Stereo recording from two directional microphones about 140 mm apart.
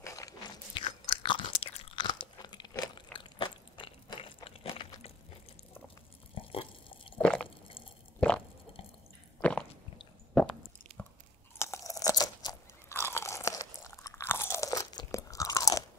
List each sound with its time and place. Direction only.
0.0 s crunch: 25° left (ahead or behind)
0.7 s chewing: 35° left (ahead or behind)
6.3 s a sound: 40° left (ahead or behind)
7.2 s squish: 5° left (ahead or behind)
7.4 s squish: 40° left (ahead or behind)
8.2 s chewing: 10° left (ahead or behind)
9.4 s a sound: 10° left (ahead or behind)
11.5 s crunch: 20° left (ahead or behind)
12.9 s crunch: 20° left (ahead or behind)